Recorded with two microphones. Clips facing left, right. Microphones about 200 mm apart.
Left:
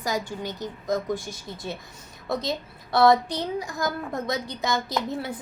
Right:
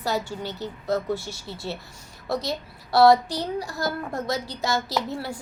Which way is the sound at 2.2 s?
20° left (ahead or behind).